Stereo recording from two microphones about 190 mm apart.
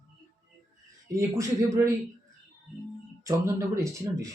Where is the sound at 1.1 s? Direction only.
15° right (ahead or behind).